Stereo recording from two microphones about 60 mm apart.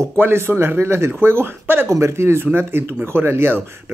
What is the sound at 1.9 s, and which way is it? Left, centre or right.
Speech, right.